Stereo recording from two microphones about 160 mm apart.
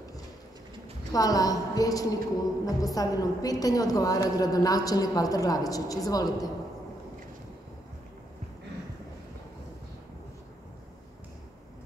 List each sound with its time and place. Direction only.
1.1 s a woman's voice: 20° left (ahead or behind)